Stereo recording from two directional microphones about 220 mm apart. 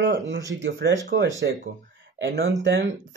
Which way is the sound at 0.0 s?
55° right (ahead or behind).